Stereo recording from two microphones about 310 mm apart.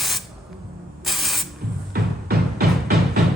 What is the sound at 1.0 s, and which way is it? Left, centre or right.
Spray, centre.